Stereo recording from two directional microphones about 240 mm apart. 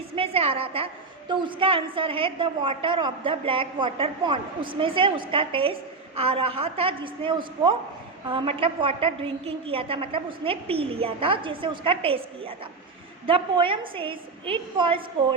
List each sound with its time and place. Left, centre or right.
0.2 s a woman's voice: right